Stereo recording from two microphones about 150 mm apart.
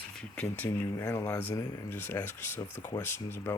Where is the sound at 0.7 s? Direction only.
15° left (ahead or behind).